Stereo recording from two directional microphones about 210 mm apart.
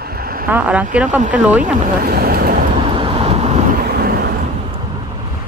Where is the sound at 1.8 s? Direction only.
45° right (ahead or behind).